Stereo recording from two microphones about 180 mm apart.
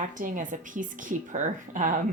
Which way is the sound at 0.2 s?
45° right (ahead or behind).